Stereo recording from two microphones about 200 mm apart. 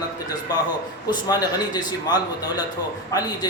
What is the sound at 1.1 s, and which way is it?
Speech, 20° left (ahead or behind).